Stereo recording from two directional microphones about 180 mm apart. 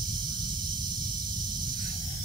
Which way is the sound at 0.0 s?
25° right (ahead or behind).